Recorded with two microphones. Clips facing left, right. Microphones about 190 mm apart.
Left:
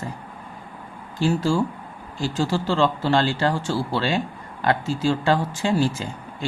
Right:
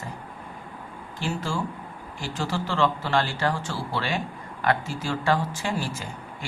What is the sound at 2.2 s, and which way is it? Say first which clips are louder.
Speech: left 6 dB; 30° left (ahead or behind).